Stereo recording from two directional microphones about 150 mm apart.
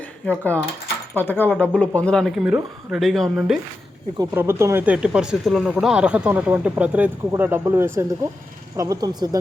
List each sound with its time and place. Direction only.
0.3 s speech: 10° left (ahead or behind)
4.4 s speech: 15° right (ahead or behind)